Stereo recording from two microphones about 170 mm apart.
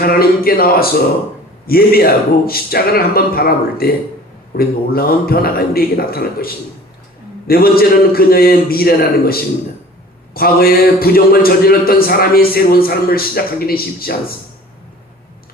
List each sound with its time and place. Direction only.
0.0 s speech: 60° left (ahead or behind)